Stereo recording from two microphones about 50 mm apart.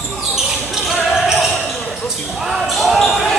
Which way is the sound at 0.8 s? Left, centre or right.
Centre.